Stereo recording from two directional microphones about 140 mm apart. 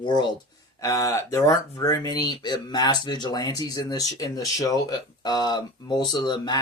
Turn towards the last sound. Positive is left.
turn(degrees=30)  # may be behind; listen again after turning